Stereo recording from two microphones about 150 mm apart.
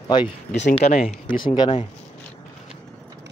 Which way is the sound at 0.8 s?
50° left (ahead or behind).